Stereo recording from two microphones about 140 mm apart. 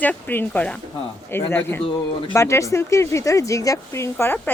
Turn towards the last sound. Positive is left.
turn(degrees=15)  # may be behind; listen again after turning